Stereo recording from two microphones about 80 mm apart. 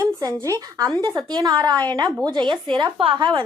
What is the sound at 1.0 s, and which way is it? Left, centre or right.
A woman's voice, right.